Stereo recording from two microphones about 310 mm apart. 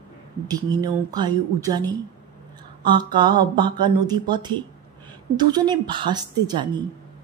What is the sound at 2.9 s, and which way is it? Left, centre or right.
A woman's voice, centre.